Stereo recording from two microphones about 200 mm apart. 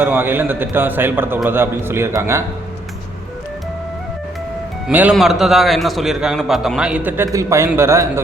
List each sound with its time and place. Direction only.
0.0 s a man's voice: 10° right (ahead or behind)
4.9 s a man's voice: 10° right (ahead or behind)